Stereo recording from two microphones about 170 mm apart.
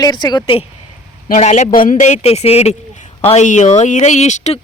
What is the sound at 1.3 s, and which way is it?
A man's voice, 45° left (ahead or behind).